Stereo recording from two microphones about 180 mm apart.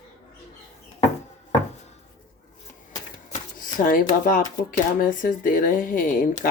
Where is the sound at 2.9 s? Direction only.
45° left (ahead or behind).